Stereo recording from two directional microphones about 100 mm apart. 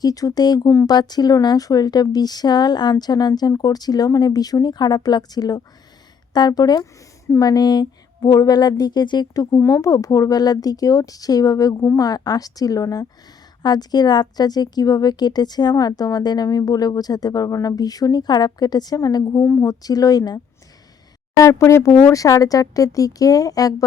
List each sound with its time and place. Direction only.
0.0 s a woman's voice: 35° left (ahead or behind)
19.4 s a woman's voice: 30° left (ahead or behind)